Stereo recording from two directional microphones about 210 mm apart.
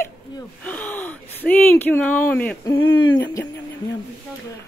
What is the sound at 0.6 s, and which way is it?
Speech, 5° left (ahead or behind).